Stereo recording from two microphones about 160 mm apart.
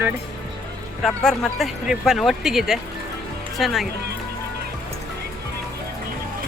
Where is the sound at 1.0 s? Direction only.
5° left (ahead or behind).